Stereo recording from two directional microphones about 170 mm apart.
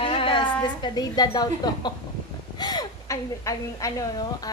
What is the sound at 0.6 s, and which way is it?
A woman's voice, 25° left (ahead or behind).